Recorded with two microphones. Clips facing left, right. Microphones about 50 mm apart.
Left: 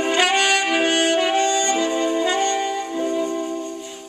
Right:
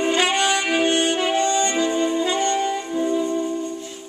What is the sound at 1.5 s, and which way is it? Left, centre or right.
Music, right.